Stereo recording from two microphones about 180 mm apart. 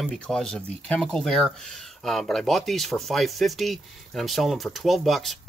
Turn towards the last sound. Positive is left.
turn(degrees=0)  # may be behind; listen again after turning